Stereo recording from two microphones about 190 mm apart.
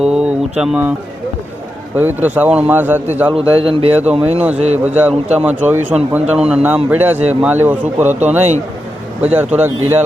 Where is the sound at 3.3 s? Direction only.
30° right (ahead or behind).